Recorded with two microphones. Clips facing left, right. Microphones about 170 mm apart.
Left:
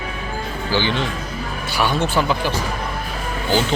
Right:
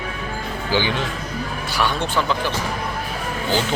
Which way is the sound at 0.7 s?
15° right (ahead or behind).